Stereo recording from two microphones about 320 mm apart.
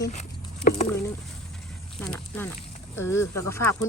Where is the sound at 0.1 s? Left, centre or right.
Left.